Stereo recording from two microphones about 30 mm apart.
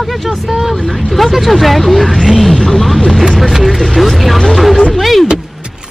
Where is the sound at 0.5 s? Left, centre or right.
Centre.